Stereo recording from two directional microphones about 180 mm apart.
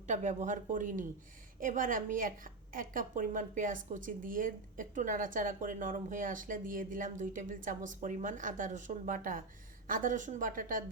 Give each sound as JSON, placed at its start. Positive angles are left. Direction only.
{"t": 0.1, "sound": "a woman's voice", "side_deg": -40}